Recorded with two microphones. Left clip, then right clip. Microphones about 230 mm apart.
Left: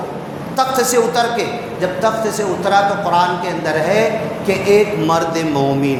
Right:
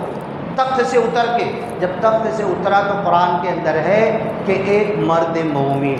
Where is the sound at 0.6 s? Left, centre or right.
Left.